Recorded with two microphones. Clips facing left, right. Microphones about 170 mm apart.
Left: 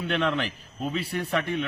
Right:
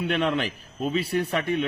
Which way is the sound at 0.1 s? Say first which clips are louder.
Even; 15° right (ahead or behind).